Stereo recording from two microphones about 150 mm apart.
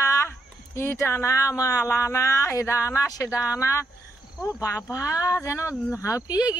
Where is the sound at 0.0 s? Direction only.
20° left (ahead or behind).